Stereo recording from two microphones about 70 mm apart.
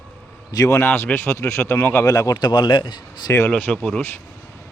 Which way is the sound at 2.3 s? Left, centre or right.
Left.